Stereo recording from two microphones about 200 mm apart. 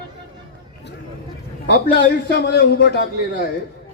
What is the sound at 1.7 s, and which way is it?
A man's voice, 50° left (ahead or behind).